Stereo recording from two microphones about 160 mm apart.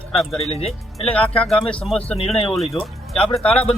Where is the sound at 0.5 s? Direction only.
40° left (ahead or behind).